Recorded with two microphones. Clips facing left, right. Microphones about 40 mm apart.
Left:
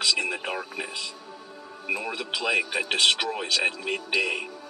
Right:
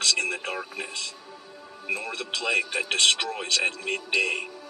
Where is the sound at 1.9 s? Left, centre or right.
Centre.